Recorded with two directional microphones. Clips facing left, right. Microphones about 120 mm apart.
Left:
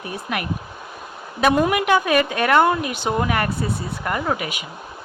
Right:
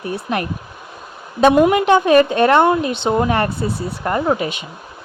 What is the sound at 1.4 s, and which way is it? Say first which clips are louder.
Speech: right 6 dB; 25° right (ahead or behind).